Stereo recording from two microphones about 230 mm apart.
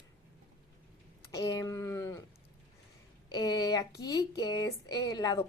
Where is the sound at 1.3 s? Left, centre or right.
Centre.